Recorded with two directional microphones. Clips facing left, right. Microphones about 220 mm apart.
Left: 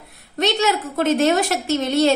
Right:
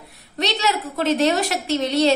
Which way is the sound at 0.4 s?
50° left (ahead or behind).